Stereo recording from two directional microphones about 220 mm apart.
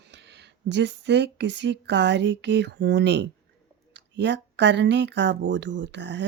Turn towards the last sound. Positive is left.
turn(degrees=-55)  # may be behind; listen again after turning